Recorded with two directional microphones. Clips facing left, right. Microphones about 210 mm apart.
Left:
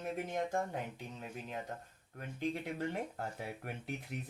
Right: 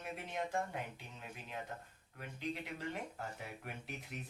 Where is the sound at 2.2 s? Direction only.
50° left (ahead or behind).